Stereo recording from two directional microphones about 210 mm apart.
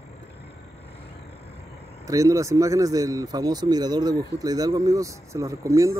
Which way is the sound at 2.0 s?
15° right (ahead or behind).